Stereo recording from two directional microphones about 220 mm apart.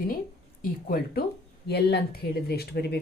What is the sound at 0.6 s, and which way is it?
A woman's voice, 40° left (ahead or behind).